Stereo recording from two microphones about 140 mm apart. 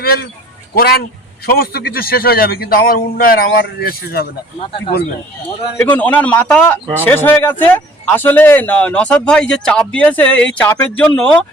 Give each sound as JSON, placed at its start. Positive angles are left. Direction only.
{"t": 0.0, "sound": "a man's voice", "side_deg": 90}
{"t": 1.5, "sound": "a man's voice", "side_deg": 90}
{"t": 5.4, "sound": "speech", "side_deg": 10}